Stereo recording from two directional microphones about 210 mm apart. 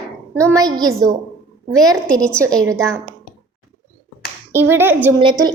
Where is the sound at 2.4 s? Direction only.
15° right (ahead or behind).